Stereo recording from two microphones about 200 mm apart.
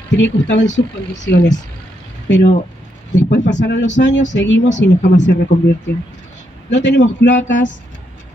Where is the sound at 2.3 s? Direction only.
60° left (ahead or behind).